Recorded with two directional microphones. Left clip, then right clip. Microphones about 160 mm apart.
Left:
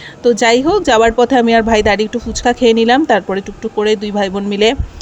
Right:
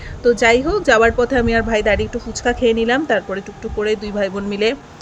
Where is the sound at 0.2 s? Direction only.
45° left (ahead or behind).